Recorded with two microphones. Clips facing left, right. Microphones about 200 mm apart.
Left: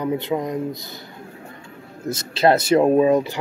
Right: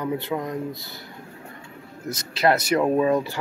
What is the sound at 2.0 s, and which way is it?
Speech, 25° left (ahead or behind).